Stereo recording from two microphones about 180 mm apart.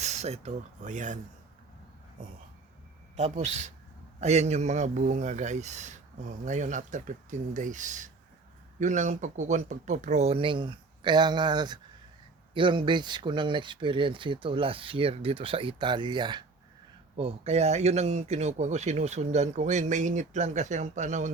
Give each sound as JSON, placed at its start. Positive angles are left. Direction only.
{"t": 0.0, "sound": "speech", "side_deg": -40}
{"t": 3.2, "sound": "speech", "side_deg": -40}